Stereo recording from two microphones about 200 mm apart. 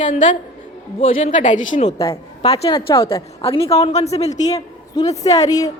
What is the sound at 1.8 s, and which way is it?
A woman's voice, 25° left (ahead or behind).